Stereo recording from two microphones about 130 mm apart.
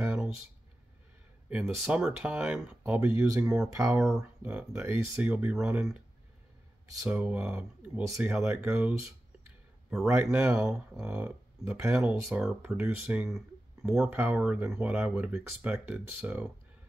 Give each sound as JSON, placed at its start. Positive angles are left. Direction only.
{"t": 0.0, "sound": "a sound", "side_deg": -5}
{"t": 1.8, "sound": "speech", "side_deg": -5}
{"t": 3.6, "sound": "speech", "side_deg": -25}
{"t": 4.2, "sound": "speech", "side_deg": -10}
{"t": 7.1, "sound": "speech", "side_deg": -10}
{"t": 10.0, "sound": "speech", "side_deg": -20}
{"t": 10.3, "sound": "speech", "side_deg": -5}